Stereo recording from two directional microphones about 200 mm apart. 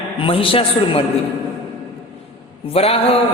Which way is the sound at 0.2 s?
25° left (ahead or behind).